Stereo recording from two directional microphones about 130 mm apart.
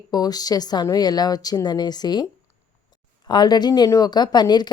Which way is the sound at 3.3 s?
35° left (ahead or behind).